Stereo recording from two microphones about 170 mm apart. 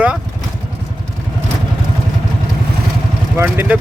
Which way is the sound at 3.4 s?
10° right (ahead or behind).